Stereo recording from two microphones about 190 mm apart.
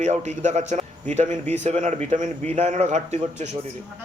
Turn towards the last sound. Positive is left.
turn(degrees=-35)  # may be behind; listen again after turning